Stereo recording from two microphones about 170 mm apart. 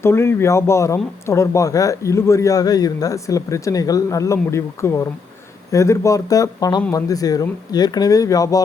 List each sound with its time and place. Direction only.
0.0 s speech: 15° left (ahead or behind)